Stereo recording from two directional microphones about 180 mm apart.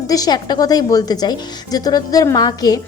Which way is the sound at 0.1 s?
20° left (ahead or behind).